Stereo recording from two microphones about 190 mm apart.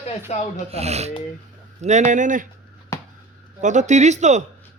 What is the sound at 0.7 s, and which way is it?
Speech, 35° right (ahead or behind).